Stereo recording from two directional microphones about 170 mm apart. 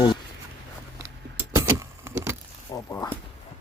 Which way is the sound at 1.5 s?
15° right (ahead or behind).